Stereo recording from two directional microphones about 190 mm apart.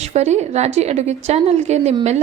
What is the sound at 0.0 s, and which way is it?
A woman's voice, 35° right (ahead or behind).